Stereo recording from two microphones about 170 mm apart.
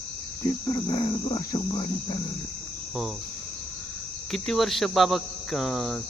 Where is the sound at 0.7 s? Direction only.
25° left (ahead or behind).